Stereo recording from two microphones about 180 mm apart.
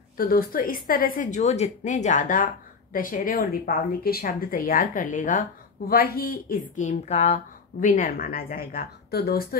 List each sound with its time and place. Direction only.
0.2 s speech: 55° left (ahead or behind)
5.9 s speech: 60° left (ahead or behind)